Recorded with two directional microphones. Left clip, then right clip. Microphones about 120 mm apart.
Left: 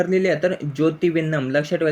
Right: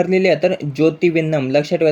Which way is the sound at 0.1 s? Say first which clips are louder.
Right 5 dB; 30° right (ahead or behind).